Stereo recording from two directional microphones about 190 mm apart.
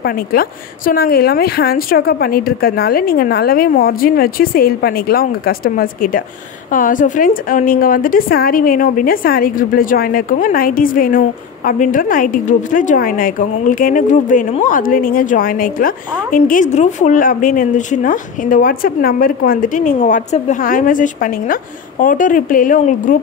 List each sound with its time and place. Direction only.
0.0 s a woman's voice: 50° left (ahead or behind)